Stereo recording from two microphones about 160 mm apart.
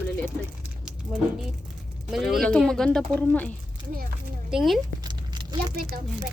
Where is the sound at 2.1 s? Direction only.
Centre (ahead or behind).